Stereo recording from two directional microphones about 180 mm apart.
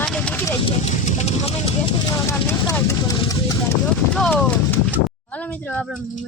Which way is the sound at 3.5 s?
15° left (ahead or behind).